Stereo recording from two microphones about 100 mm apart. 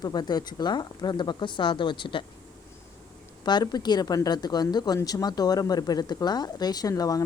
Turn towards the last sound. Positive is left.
turn(degrees=35)  # may be behind; listen again after turning